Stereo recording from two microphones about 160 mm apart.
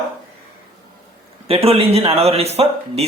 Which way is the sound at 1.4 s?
35° right (ahead or behind).